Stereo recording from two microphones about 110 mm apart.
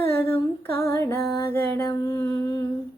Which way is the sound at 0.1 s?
20° left (ahead or behind).